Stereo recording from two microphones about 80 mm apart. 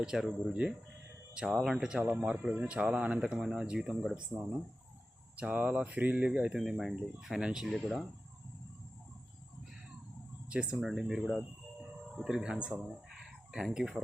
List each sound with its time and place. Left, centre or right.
0.0 s speech: centre
5.4 s speech: centre
10.5 s speech: centre